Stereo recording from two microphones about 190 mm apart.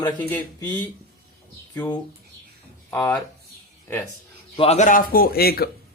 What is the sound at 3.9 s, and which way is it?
Speech, 15° left (ahead or behind).